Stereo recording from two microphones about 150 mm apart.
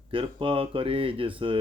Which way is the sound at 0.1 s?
35° right (ahead or behind).